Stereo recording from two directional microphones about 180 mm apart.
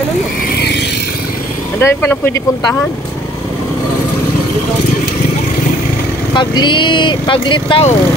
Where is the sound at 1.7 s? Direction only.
10° left (ahead or behind).